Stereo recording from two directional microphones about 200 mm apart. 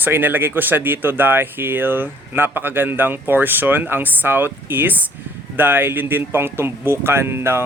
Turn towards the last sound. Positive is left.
turn(degrees=-10)  # may be behind; listen again after turning